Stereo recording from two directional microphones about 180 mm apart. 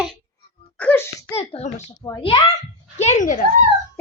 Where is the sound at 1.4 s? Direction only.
35° left (ahead or behind).